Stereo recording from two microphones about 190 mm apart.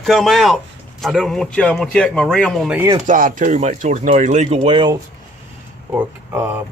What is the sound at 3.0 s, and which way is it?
Speech, 45° right (ahead or behind).